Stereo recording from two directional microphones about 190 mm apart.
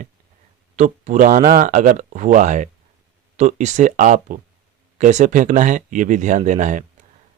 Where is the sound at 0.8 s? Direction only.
40° right (ahead or behind).